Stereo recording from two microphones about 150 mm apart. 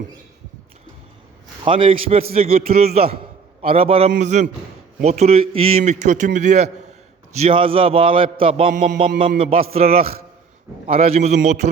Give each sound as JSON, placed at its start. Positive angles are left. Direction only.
{"t": 1.6, "sound": "a man's voice", "side_deg": -35}
{"t": 4.1, "sound": "a man's voice", "side_deg": -50}
{"t": 7.3, "sound": "a man's voice", "side_deg": -40}